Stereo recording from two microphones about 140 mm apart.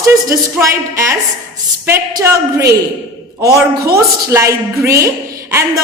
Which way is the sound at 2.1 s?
20° right (ahead or behind).